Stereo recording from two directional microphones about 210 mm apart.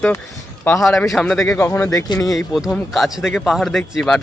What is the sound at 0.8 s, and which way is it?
A man's voice, centre (ahead or behind).